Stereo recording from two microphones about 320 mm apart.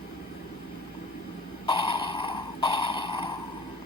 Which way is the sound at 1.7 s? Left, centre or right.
Centre.